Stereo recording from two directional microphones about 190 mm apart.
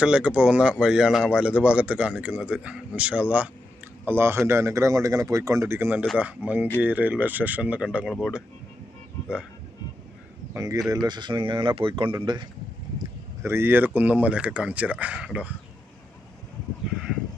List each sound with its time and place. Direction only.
0.0 s speech: 5° right (ahead or behind)
10.5 s speech: 15° right (ahead or behind)
13.4 s speech: 10° right (ahead or behind)